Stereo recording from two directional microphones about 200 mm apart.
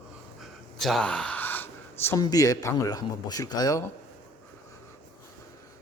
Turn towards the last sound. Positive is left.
turn(degrees=15)  # may be behind; listen again after turning